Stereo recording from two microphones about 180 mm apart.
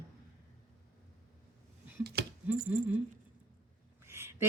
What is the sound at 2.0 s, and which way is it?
Speech, 65° right (ahead or behind).